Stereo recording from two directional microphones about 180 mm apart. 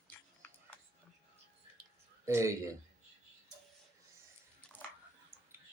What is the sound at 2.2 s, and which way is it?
Speech, 15° right (ahead or behind).